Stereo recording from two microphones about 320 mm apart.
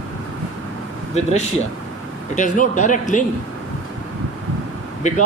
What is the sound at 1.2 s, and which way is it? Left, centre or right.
Speech, left.